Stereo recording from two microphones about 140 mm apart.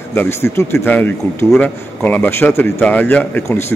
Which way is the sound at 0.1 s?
15° left (ahead or behind).